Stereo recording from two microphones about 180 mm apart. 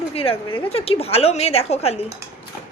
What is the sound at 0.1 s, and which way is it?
A woman's voice, 30° left (ahead or behind).